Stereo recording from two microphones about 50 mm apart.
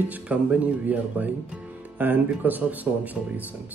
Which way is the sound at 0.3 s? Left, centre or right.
Right.